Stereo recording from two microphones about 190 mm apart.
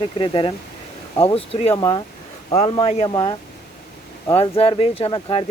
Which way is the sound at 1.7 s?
20° left (ahead or behind).